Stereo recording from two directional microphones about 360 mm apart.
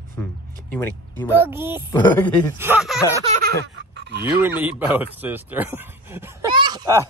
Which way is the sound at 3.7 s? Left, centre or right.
Right.